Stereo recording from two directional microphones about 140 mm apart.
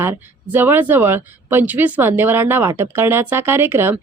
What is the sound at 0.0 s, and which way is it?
Speech, 15° right (ahead or behind).